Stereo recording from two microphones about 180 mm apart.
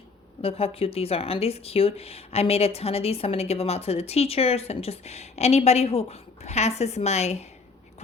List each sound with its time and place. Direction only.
0.4 s speech: 30° left (ahead or behind)